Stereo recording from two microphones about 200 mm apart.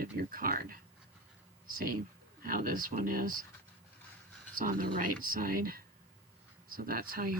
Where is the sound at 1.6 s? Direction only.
45° right (ahead or behind).